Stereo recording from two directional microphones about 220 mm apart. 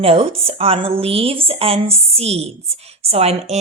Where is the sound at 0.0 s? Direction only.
25° right (ahead or behind).